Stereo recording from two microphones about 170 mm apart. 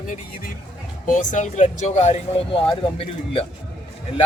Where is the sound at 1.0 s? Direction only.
50° left (ahead or behind).